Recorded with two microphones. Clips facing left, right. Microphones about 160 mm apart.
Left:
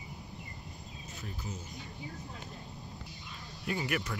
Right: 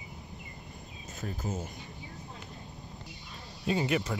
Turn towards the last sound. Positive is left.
turn(degrees=-25)  # may be behind; listen again after turning